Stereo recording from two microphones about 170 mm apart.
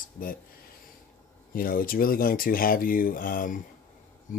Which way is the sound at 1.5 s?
55° left (ahead or behind).